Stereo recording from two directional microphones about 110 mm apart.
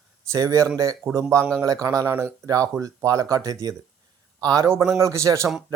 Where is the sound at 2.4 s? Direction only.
30° right (ahead or behind).